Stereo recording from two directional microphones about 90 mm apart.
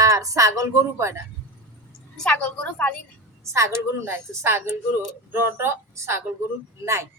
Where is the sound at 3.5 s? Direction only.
30° right (ahead or behind).